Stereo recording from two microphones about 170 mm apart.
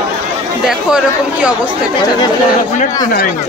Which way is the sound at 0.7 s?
5° right (ahead or behind).